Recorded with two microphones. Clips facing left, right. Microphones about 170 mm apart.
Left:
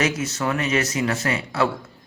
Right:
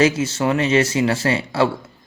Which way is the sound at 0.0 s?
30° right (ahead or behind).